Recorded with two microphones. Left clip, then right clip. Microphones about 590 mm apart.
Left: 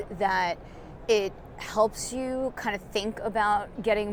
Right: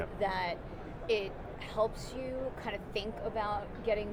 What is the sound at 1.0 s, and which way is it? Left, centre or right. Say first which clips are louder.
Speech: left 8 dB; left.